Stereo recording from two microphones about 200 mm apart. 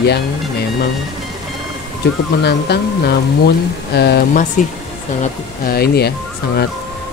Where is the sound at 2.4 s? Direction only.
55° left (ahead or behind).